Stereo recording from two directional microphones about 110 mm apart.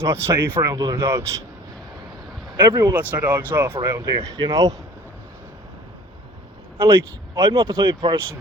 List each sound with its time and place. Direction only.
0.0 s speech: 25° right (ahead or behind)
2.5 s speech: 40° right (ahead or behind)
2.9 s speech: 15° right (ahead or behind)
3.8 s speech: 30° right (ahead or behind)
6.7 s speech: 25° right (ahead or behind)